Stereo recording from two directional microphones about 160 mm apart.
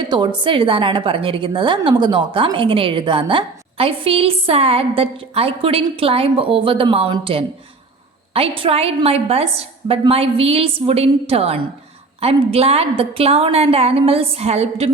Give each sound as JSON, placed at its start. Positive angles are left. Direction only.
{"t": 0.1, "sound": "a woman's voice", "side_deg": -30}